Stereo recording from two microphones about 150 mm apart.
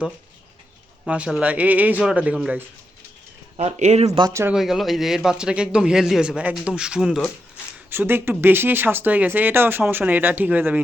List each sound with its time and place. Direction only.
1.0 s speech: 5° right (ahead or behind)
3.6 s speech: 50° right (ahead or behind)
4.2 s speech: 20° right (ahead or behind)
4.5 s a man's voice: centre (ahead or behind)